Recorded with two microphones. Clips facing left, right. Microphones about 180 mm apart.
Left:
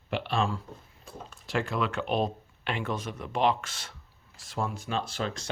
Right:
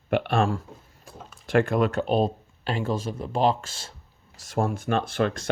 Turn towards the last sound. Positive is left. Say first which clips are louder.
# right 8 dB
turn(degrees=-55)  # may be behind; listen again after turning